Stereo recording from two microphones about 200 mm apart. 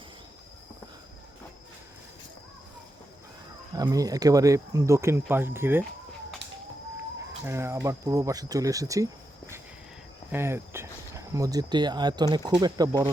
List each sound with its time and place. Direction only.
3.8 s speech: 20° right (ahead or behind)
7.4 s speech: 15° right (ahead or behind)
10.3 s speech: 10° right (ahead or behind)